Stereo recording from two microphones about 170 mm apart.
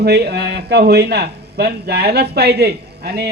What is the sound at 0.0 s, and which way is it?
A man's voice, 75° right (ahead or behind).